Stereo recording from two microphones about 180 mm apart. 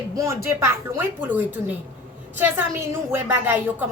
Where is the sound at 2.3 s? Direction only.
10° right (ahead or behind).